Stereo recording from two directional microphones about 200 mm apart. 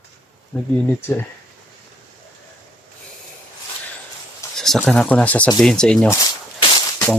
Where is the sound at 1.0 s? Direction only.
10° left (ahead or behind).